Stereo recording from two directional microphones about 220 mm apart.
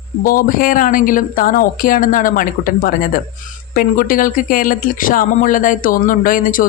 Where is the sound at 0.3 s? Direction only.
40° left (ahead or behind).